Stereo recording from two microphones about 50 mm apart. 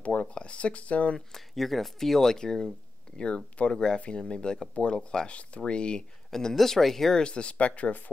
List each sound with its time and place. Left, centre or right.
0.0 s speech: left
1.3 s speech: centre
7.2 s speech: centre